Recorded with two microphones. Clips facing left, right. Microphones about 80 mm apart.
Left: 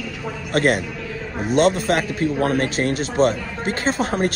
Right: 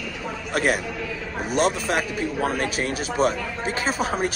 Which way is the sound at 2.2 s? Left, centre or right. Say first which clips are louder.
Left 5 dB; left.